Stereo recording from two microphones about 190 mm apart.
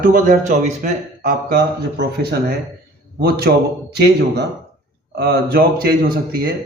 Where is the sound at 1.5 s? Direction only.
60° right (ahead or behind).